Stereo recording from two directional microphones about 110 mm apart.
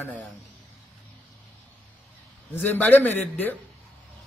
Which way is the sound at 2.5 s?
15° left (ahead or behind).